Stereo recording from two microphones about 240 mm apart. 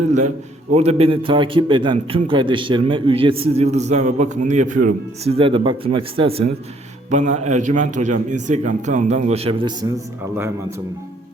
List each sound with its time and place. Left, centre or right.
0.7 s a man's voice: right